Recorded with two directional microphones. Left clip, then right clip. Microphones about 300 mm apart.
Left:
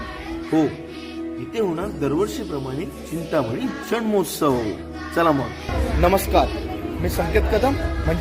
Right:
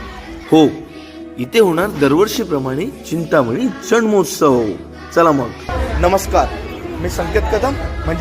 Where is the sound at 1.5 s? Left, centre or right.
Centre.